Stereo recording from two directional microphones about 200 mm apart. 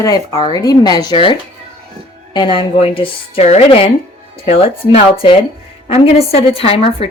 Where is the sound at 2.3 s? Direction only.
25° left (ahead or behind).